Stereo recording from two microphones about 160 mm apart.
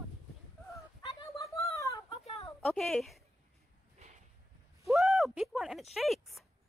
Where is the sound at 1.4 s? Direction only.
20° left (ahead or behind).